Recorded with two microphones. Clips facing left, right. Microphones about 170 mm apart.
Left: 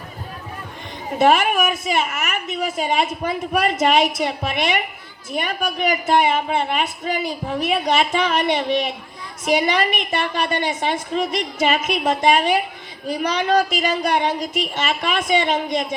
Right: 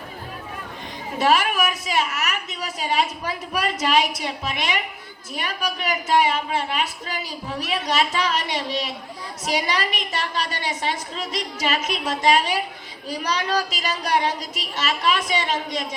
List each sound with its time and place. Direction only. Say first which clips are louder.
1.2 s a woman's voice: left 4 dB; 50° left (ahead or behind)